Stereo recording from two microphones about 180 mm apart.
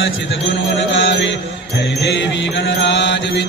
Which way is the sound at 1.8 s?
70° left (ahead or behind).